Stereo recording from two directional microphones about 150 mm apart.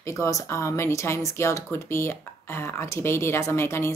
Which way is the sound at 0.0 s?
20° left (ahead or behind).